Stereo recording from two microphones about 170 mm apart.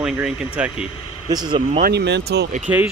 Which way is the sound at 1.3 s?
25° right (ahead or behind).